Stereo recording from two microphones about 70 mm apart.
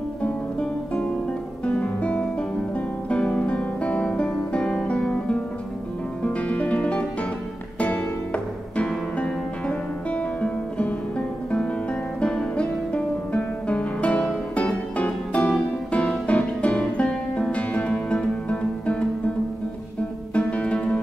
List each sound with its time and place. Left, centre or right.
0.2 s music: centre
20.3 s music: centre